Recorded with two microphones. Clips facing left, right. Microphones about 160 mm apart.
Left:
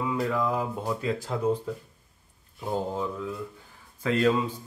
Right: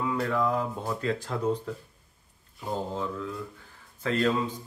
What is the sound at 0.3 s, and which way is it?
Speech, 10° left (ahead or behind).